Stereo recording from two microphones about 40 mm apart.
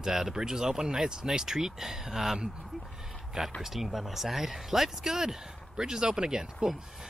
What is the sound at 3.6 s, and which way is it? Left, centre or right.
Speech, centre.